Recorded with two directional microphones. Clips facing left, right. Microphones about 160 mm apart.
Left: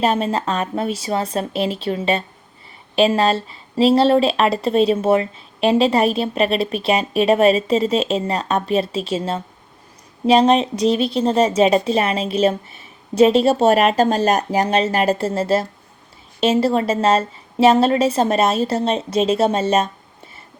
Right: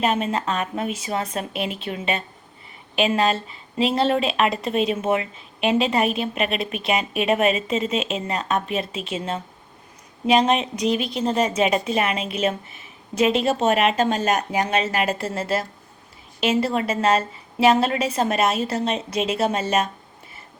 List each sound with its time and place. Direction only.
0.0 s a woman's voice: 35° left (ahead or behind)